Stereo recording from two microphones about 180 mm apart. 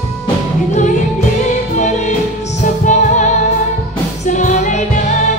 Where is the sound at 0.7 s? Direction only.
45° left (ahead or behind).